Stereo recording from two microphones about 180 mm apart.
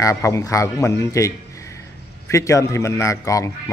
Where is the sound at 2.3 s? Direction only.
15° left (ahead or behind).